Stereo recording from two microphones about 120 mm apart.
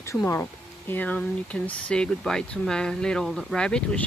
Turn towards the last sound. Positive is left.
turn(degrees=5)  # may be behind; listen again after turning